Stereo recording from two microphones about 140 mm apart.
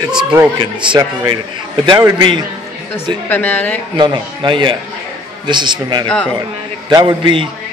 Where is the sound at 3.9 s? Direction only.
35° right (ahead or behind).